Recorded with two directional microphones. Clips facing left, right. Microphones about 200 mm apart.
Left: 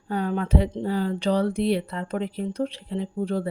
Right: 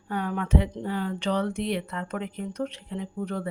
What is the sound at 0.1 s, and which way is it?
Speech, 30° left (ahead or behind).